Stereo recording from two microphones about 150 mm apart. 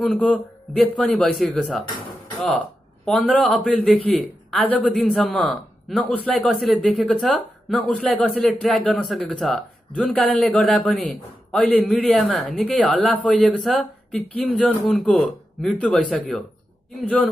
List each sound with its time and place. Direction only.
0.1 s a man's voice: 5° left (ahead or behind)